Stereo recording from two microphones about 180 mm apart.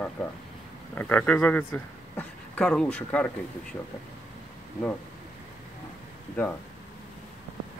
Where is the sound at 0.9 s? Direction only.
10° left (ahead or behind).